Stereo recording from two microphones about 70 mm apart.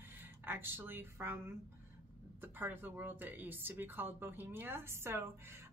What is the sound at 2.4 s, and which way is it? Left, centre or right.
Speech, right.